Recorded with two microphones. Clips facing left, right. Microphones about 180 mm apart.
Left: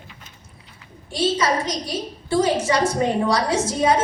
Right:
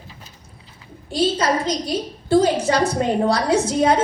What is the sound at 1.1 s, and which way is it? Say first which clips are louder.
A woman's voice: right 2 dB; 60° right (ahead or behind).